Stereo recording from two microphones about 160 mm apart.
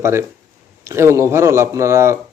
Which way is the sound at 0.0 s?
15° right (ahead or behind).